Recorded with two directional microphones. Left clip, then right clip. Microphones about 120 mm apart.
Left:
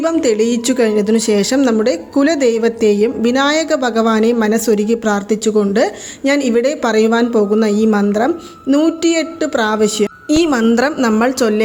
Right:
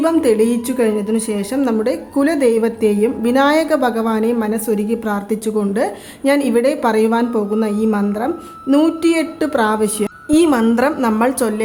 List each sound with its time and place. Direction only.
0.0 s a woman's voice: 20° left (ahead or behind)
10.2 s a woman's voice: 25° left (ahead or behind)